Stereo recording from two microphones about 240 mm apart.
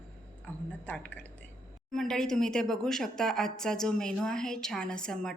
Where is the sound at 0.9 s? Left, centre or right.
Centre.